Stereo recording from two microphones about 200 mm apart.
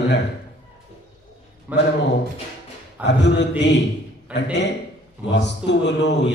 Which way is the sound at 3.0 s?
60° left (ahead or behind).